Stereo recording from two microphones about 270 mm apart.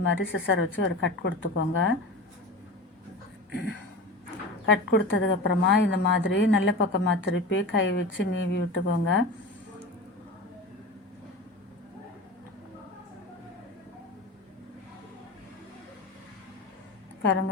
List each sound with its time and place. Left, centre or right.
0.0 s a woman's voice: left
3.5 s a sound: left
4.6 s a woman's voice: left